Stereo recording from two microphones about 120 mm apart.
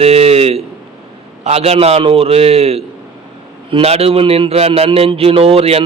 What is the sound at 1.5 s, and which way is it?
A man's voice, 60° right (ahead or behind).